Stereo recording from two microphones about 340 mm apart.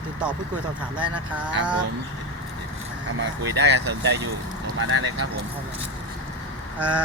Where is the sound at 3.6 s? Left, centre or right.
Right.